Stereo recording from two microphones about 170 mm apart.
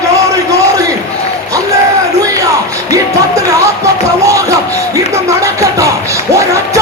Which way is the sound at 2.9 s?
20° right (ahead or behind).